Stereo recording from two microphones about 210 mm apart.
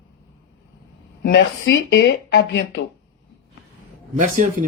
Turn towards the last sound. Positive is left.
turn(degrees=-40)  # may be behind; listen again after turning